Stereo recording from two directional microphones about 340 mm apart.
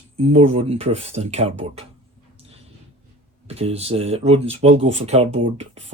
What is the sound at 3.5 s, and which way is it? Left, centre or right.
Speech, centre.